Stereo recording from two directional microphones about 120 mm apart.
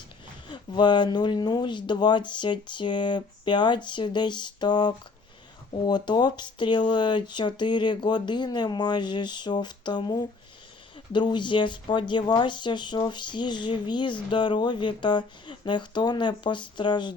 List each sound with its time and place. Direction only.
0.5 s speech: 40° left (ahead or behind)